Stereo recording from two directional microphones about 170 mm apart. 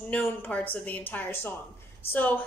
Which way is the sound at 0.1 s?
10° left (ahead or behind).